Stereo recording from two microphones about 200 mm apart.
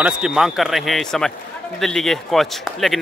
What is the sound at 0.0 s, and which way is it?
Speech, 5° right (ahead or behind).